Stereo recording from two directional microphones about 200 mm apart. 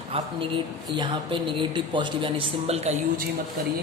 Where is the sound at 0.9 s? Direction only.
20° right (ahead or behind).